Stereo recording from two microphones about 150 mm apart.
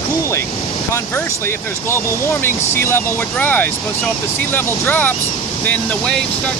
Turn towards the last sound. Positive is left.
turn(degrees=10)  # may be behind; listen again after turning